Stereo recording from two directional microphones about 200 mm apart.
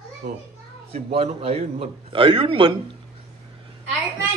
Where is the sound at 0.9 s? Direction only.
30° right (ahead or behind).